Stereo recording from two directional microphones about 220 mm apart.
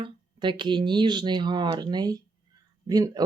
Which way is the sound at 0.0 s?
20° right (ahead or behind).